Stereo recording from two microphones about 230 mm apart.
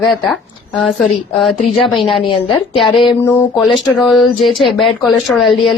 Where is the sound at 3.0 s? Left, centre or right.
Centre.